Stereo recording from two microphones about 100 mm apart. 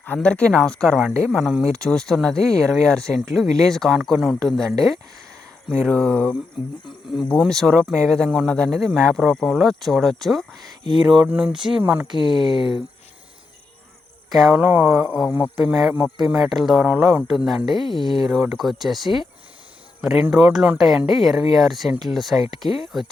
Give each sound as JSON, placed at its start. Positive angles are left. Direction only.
{"t": 0.0, "sound": "speech", "side_deg": 15}
{"t": 12.0, "sound": "speech", "side_deg": -45}
{"t": 14.3, "sound": "speech", "side_deg": 0}
{"t": 14.6, "sound": "speech", "side_deg": -15}
{"t": 16.8, "sound": "speech", "side_deg": -15}
{"t": 17.2, "sound": "speech", "side_deg": 0}